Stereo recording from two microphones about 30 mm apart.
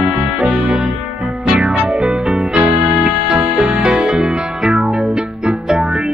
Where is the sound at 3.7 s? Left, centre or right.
Right.